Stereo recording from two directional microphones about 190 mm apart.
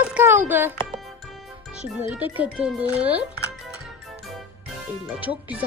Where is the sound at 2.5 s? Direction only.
5° right (ahead or behind).